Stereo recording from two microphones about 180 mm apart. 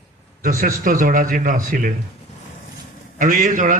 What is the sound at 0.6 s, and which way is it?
A man's voice, 50° right (ahead or behind).